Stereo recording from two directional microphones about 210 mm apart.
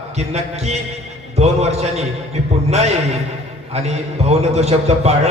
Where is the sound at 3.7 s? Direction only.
30° right (ahead or behind).